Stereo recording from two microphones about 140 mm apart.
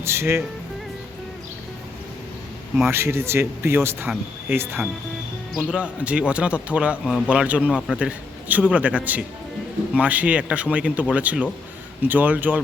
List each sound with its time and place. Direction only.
0.0 s a man's voice: 20° right (ahead or behind)
2.8 s a man's voice: 15° right (ahead or behind)
7.7 s speech: 5° left (ahead or behind)
7.9 s a man's voice: 10° right (ahead or behind)